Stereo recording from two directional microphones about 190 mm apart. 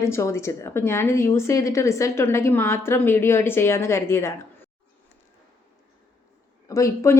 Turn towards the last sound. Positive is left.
turn(degrees=15)  # may be behind; listen again after turning